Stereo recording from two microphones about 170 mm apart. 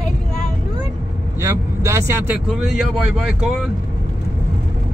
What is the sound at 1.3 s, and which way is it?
Speech, 15° right (ahead or behind).